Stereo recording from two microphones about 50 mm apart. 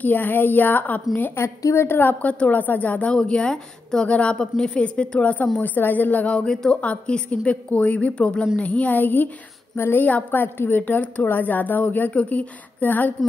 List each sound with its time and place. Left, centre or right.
0.0 s a woman's voice: left
1.3 s a woman's voice: left
1.9 s a woman's voice: left
2.2 s a woman's voice: left
3.1 s a woman's voice: centre; by 6.3 s left
6.3 s a woman's voice: centre; by 10.0 s left
10.0 s a woman's voice: left